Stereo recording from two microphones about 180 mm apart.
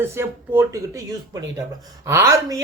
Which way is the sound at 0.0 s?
15° right (ahead or behind).